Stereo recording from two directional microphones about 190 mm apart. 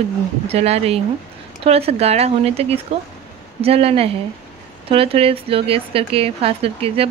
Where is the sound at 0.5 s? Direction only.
35° right (ahead or behind).